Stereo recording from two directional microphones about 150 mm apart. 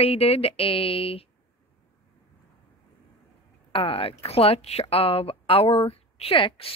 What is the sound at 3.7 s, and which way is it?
Speech, 40° left (ahead or behind).